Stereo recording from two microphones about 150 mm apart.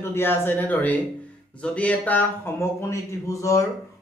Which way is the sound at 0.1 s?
15° left (ahead or behind).